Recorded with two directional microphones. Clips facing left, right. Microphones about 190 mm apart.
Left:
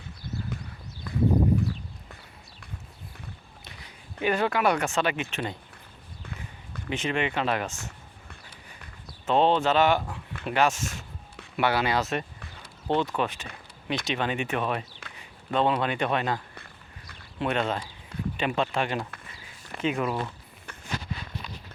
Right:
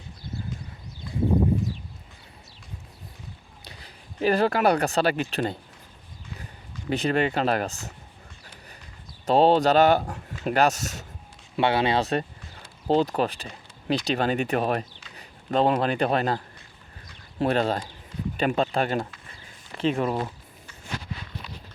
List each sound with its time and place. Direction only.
1.1 s a sound: 65° left (ahead or behind)
3.6 s speech: 35° right (ahead or behind)
6.9 s speech: 35° right (ahead or behind)
9.2 s speech: 35° right (ahead or behind)
11.5 s speech: 25° right (ahead or behind)
17.4 s speech: 35° right (ahead or behind)